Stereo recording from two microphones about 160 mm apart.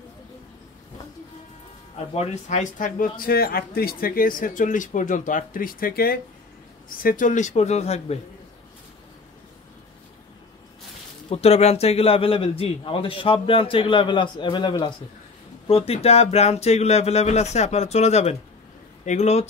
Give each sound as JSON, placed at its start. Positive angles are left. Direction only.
{"t": 2.1, "sound": "speech", "side_deg": 50}
{"t": 11.2, "sound": "a man's voice", "side_deg": 40}